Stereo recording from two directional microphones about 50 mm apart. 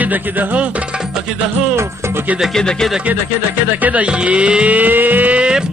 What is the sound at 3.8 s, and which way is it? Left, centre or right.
Music, right.